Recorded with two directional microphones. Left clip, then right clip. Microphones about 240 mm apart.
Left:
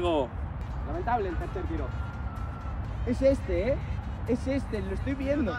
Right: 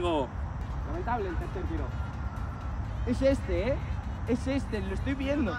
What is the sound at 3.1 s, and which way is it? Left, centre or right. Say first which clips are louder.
Speech: left 2 dB; centre.